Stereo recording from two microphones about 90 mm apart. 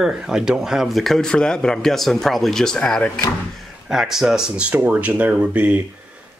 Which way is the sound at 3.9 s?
5° right (ahead or behind).